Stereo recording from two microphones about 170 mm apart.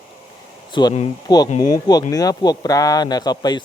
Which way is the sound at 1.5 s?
45° left (ahead or behind).